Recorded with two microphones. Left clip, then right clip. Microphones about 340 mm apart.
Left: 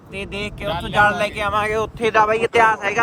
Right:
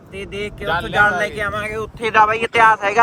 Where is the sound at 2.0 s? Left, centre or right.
Centre.